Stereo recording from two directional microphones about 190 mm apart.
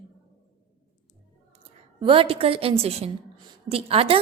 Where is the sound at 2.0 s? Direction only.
25° right (ahead or behind).